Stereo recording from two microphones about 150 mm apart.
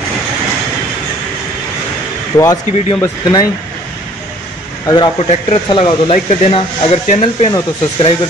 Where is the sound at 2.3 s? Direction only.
25° left (ahead or behind).